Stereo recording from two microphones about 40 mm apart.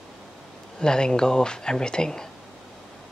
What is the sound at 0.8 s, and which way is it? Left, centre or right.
Speech, centre.